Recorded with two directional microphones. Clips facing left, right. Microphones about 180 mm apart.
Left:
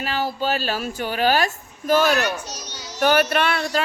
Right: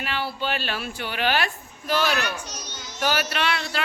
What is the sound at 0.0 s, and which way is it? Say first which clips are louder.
Speech: left 4 dB; 40° left (ahead or behind).